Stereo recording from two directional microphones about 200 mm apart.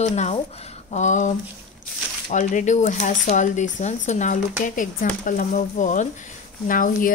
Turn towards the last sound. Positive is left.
turn(degrees=45)  # may be behind; listen again after turning